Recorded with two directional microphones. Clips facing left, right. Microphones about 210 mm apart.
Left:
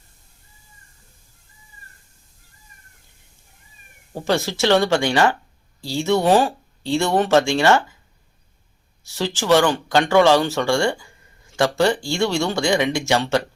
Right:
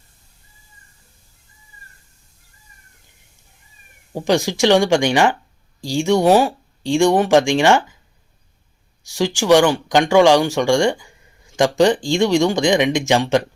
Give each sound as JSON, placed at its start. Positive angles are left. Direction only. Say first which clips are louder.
{"t": 4.1, "sound": "speech", "louder": "right 4 dB", "side_deg": -15}
{"t": 9.0, "sound": "speech", "louder": "right 4 dB", "side_deg": -15}